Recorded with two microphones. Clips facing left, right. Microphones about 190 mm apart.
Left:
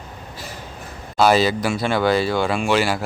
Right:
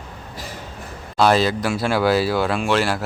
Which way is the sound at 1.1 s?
Centre (ahead or behind).